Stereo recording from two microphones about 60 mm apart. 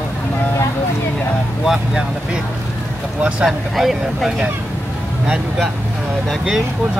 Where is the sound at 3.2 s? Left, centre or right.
Centre.